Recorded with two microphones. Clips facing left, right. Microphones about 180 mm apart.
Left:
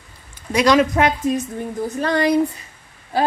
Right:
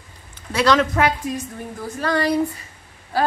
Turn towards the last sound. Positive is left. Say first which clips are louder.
# left 1 dB
turn(degrees=20)  # may be behind; listen again after turning